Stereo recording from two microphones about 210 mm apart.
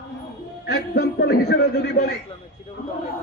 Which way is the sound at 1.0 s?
50° left (ahead or behind).